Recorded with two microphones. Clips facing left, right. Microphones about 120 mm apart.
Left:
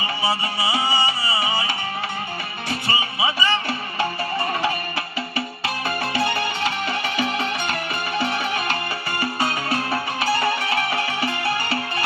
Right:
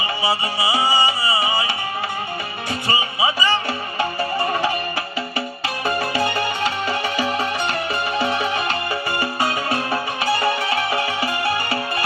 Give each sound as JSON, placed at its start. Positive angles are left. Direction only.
{"t": 0.2, "sound": "music", "side_deg": -25}
{"t": 2.6, "sound": "music", "side_deg": -25}